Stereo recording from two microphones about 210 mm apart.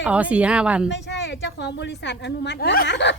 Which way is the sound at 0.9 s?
55° left (ahead or behind).